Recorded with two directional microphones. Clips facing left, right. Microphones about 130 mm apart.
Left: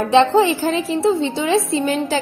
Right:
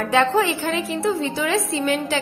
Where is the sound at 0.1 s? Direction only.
25° left (ahead or behind).